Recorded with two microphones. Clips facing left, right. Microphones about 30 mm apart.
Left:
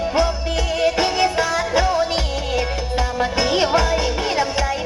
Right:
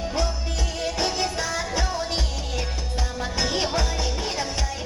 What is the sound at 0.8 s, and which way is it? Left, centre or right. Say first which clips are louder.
Music: left 8 dB; left.